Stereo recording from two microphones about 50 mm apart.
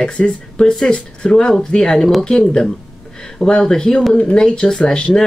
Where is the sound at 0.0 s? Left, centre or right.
Centre.